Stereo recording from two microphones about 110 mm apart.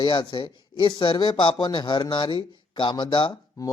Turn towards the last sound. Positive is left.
turn(degrees=30)  # may be behind; listen again after turning